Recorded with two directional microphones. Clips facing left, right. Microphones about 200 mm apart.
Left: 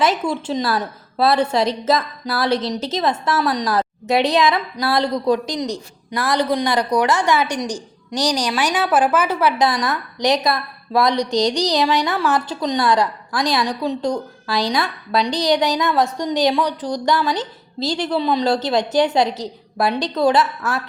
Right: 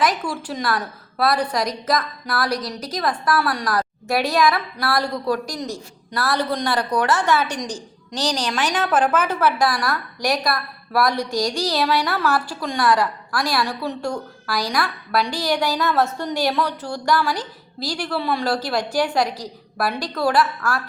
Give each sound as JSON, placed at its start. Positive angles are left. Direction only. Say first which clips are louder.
{"t": 0.0, "sound": "a woman's voice", "louder": "left 3 dB", "side_deg": 25}